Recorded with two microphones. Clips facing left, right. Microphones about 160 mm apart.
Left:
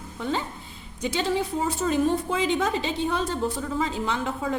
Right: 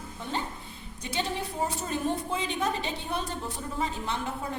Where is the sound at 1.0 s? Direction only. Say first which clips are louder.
Left 7 dB; 90° left.